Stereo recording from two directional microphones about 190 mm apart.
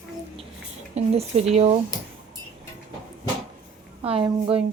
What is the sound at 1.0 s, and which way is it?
Speech, 35° right (ahead or behind).